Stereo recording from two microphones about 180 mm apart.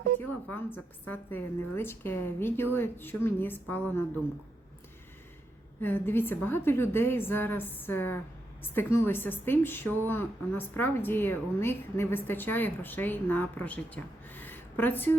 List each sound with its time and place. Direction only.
0.2 s a woman's voice: 10° left (ahead or behind)
5.8 s a woman's voice: 10° left (ahead or behind)